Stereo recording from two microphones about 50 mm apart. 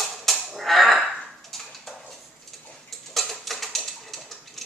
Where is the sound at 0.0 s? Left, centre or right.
Centre.